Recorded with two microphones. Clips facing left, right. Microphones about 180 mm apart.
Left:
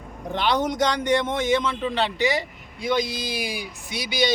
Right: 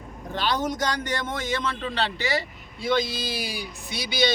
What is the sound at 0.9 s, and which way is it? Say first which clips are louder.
A man's voice: left 6 dB; 20° left (ahead or behind).